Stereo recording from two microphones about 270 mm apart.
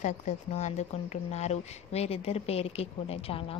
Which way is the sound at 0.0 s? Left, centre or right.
Left.